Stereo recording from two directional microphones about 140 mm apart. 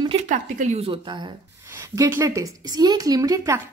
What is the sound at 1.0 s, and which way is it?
Speech, 30° right (ahead or behind).